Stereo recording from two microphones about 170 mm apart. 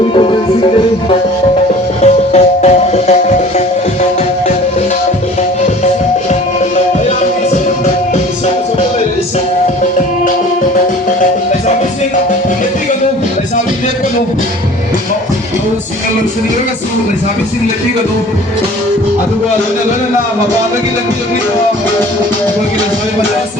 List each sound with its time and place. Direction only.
0.1 s music: 30° left (ahead or behind)
2.0 s music: 40° left (ahead or behind)